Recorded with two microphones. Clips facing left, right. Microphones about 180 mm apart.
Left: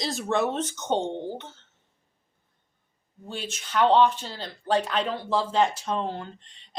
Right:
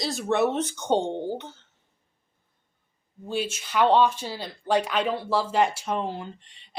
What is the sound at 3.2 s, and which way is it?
Speech, 10° right (ahead or behind).